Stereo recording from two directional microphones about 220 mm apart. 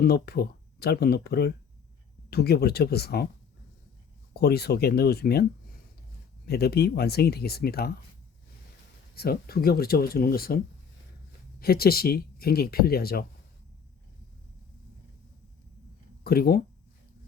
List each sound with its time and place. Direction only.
0.0 s speech: 45° left (ahead or behind)
4.4 s speech: 45° left (ahead or behind)
9.1 s speech: 45° left (ahead or behind)
11.6 s speech: 45° left (ahead or behind)
16.2 s speech: 45° left (ahead or behind)